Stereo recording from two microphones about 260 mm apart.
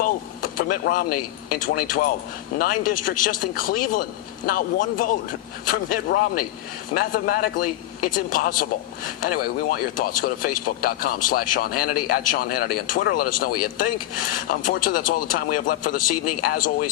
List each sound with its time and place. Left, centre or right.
0.0 s a sound: left
1.5 s speech: left
16.0 s a man's voice: left
16.4 s speech: left